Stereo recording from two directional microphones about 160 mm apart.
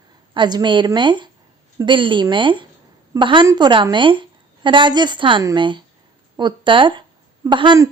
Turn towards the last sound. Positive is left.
turn(degrees=-30)  # may be behind; listen again after turning